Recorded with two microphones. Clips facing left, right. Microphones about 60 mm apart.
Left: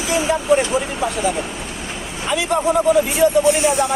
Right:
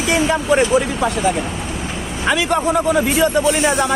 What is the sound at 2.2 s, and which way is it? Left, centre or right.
Speech, right.